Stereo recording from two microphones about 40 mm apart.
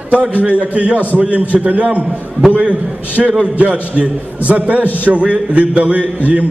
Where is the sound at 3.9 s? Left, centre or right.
Right.